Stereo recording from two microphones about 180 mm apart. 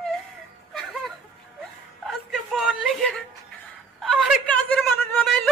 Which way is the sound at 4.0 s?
Centre (ahead or behind).